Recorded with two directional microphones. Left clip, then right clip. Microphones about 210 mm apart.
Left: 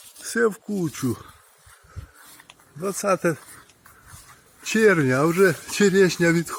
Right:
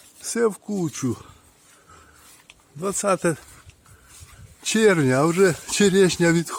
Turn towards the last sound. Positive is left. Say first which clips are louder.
# right 1 dB
turn(degrees=-15)  # may be behind; listen again after turning